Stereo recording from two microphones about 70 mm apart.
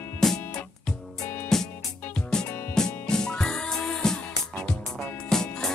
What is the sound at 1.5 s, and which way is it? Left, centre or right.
Music, centre.